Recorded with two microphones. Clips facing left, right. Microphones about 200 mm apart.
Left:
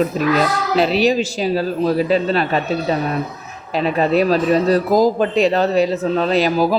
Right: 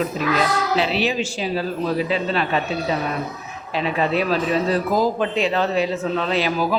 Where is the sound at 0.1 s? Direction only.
40° left (ahead or behind).